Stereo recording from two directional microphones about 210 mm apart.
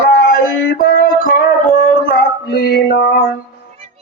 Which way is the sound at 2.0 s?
45° left (ahead or behind).